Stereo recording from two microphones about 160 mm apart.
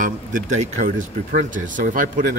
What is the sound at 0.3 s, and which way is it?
Speech, 55° right (ahead or behind).